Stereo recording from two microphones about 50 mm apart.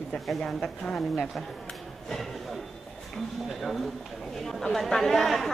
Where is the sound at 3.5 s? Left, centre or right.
Centre.